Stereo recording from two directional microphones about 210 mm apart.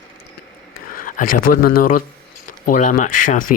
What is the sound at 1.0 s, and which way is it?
Speech, 40° left (ahead or behind).